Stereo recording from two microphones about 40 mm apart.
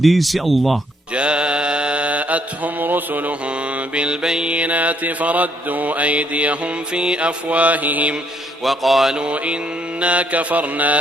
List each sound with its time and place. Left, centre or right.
0.0 s speech: centre
1.1 s mantra: right
3.4 s mantra: right
4.5 s mantra: right
8.6 s speech: centre
9.1 s mantra: right